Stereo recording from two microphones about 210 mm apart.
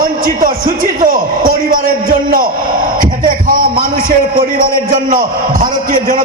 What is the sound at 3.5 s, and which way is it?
A man's voice, 40° right (ahead or behind).